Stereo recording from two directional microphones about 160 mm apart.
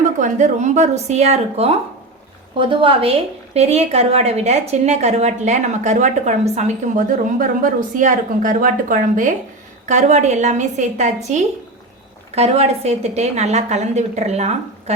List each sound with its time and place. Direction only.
0.2 s a woman's voice: 50° right (ahead or behind)
9.9 s a woman's voice: 45° right (ahead or behind)